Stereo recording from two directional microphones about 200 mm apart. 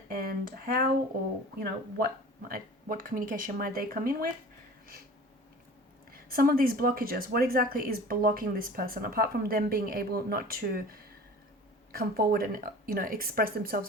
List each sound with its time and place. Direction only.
0.1 s a sound: 45° right (ahead or behind)
2.5 s speech: 45° right (ahead or behind)
6.1 s speech: 45° right (ahead or behind)
11.9 s speech: 50° right (ahead or behind)